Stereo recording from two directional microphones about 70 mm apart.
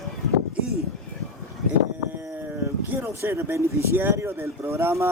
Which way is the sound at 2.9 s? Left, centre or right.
Right.